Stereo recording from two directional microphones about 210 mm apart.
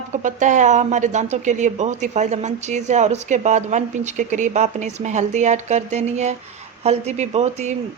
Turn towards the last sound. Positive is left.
turn(degrees=-30)  # may be behind; listen again after turning